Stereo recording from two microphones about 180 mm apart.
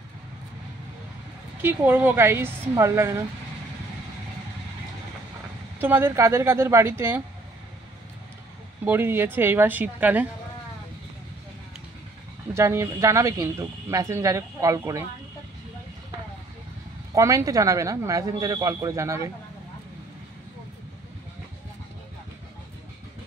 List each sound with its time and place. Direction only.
1.6 s speech: 10° right (ahead or behind)
5.8 s speech: 10° right (ahead or behind)
8.8 s speech: 10° right (ahead or behind)
12.5 s speech: 15° right (ahead or behind)
17.1 s speech: 15° right (ahead or behind)